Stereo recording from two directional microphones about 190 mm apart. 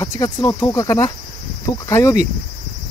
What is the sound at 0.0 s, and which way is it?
Speech, 15° left (ahead or behind).